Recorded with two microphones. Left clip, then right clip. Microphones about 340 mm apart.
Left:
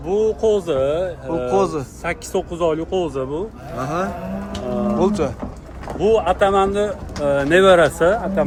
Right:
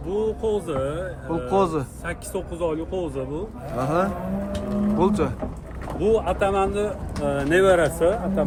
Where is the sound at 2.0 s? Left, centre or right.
Left.